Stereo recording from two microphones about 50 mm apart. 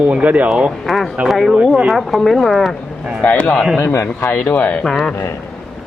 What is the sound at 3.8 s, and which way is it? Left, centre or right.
Speech, left.